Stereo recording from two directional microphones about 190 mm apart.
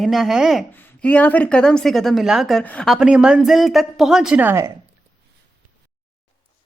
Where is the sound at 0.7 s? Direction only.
10° left (ahead or behind); by 4.7 s 10° right (ahead or behind).